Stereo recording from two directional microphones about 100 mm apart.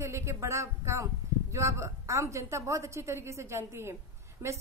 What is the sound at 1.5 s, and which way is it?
A woman's voice, 30° right (ahead or behind).